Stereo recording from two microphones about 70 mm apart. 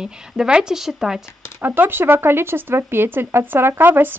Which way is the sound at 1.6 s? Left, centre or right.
Right.